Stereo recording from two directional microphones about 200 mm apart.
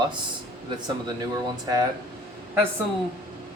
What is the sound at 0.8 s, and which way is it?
Speech, 20° right (ahead or behind).